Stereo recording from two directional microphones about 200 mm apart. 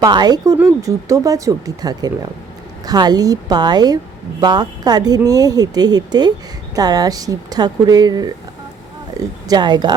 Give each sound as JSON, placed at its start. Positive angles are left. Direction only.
{"t": 0.0, "sound": "speech", "side_deg": -20}
{"t": 9.2, "sound": "a sound", "side_deg": -15}
{"t": 9.5, "sound": "speech", "side_deg": -20}